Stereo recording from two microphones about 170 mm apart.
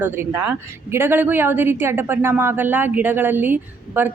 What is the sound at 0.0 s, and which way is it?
A woman's voice, 15° right (ahead or behind).